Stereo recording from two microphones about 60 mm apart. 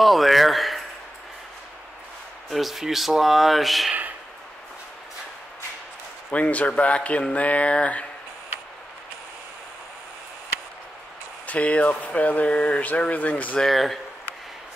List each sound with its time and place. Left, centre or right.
0.0 s a sound: centre
2.5 s speech: centre
6.3 s speech: left
11.4 s speech: left
13.6 s speech: centre